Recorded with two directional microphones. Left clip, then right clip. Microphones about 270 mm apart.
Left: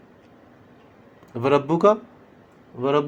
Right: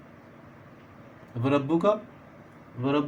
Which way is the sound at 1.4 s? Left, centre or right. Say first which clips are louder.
Left 7 dB; left.